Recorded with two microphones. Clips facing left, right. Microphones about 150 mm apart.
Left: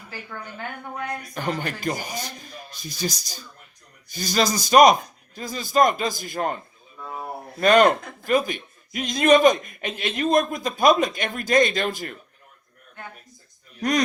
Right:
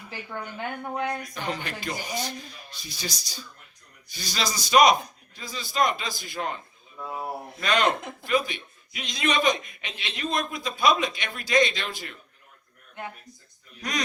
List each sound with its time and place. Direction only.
1.3 s speech: 45° left (ahead or behind)
7.0 s a sound: 5° right (ahead or behind)
7.6 s speech: 45° left (ahead or behind)